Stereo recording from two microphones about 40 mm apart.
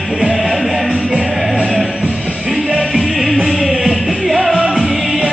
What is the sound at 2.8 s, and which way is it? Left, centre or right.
Music, centre.